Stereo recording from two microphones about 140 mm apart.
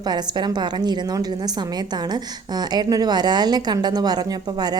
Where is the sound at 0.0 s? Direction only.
30° right (ahead or behind).